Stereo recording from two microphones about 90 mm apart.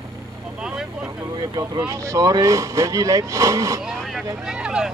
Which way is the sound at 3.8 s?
5° right (ahead or behind).